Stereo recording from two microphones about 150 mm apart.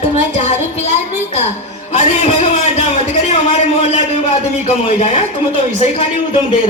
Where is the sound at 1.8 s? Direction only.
50° left (ahead or behind).